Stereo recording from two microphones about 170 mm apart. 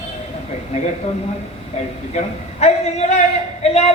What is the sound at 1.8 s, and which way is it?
A man's voice, 40° left (ahead or behind).